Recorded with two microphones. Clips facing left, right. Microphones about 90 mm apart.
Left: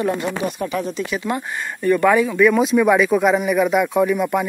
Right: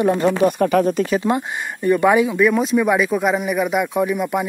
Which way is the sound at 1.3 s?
20° right (ahead or behind).